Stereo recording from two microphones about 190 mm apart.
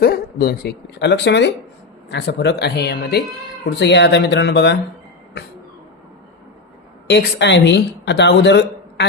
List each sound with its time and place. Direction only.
0.0 s speech: 55° left (ahead or behind)
7.1 s speech: 65° left (ahead or behind)